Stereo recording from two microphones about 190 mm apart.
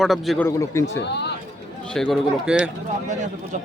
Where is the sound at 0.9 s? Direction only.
65° left (ahead or behind).